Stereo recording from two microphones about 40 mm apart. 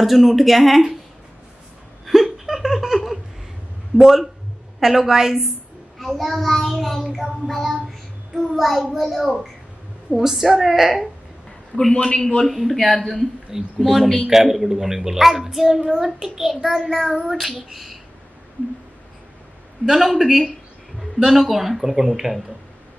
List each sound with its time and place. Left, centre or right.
0.0 s a child's voice: centre
2.0 s laughter: centre
4.0 s a child's voice: centre
5.9 s a child's voice: centre
8.5 s a child's voice: centre
11.9 s a man's voice: left
12.4 s a child's voice: centre
13.5 s a woman's voice: centre
14.0 s a man's voice: centre
14.3 s a woman's voice: centre
19.9 s a woman's voice: centre